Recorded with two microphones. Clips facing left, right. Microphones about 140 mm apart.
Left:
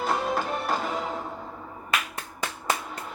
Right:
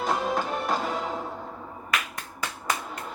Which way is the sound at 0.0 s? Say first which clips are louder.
Even; centre (ahead or behind).